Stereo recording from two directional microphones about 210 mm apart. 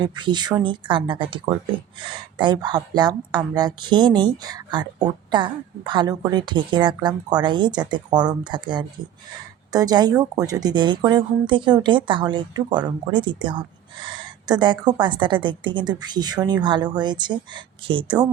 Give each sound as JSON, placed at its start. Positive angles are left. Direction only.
{"t": 0.0, "sound": "speech", "side_deg": -20}